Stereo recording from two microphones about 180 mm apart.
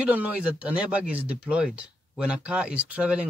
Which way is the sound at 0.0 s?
10° right (ahead or behind).